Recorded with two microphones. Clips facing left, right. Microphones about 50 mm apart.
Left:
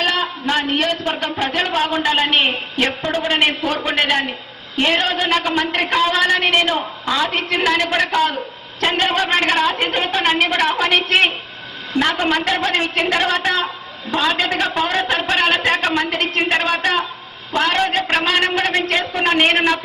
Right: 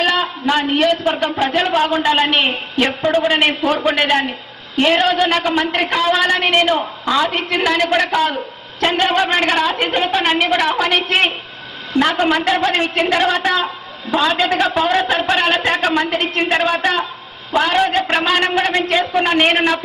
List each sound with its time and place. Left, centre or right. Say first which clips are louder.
0.0 s a sound: right 3 dB; centre
0.8 s a man's voice: right 4 dB; centre
14.1 s speech: right 3 dB; centre
14.5 s a man's voice: right 3 dB; centre